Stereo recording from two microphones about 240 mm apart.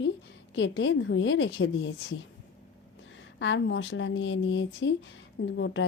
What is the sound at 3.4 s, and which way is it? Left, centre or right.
A woman's voice, left.